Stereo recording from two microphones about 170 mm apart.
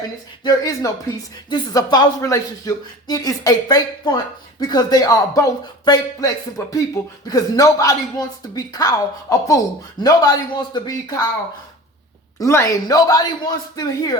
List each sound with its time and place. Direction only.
0.4 s speech: 20° left (ahead or behind)
12.4 s speech: 20° left (ahead or behind)